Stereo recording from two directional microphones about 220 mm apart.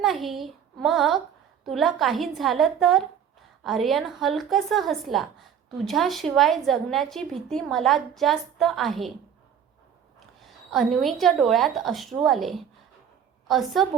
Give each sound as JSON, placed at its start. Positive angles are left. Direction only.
{"t": 0.0, "sound": "a woman's voice", "side_deg": 0}
{"t": 10.4, "sound": "a woman's voice", "side_deg": 0}